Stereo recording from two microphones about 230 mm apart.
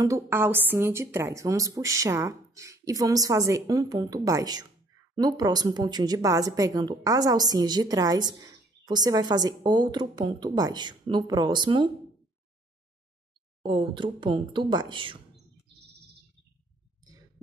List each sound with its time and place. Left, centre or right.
0.0 s speech: centre
13.6 s speech: right